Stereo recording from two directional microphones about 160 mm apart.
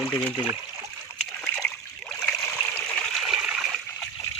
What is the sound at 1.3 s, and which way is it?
Splash, 5° left (ahead or behind).